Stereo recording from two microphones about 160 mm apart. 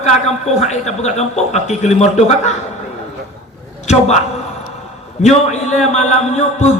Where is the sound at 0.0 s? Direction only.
45° left (ahead or behind).